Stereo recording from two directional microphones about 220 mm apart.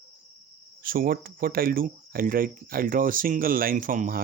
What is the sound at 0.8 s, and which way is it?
Speech, 40° right (ahead or behind).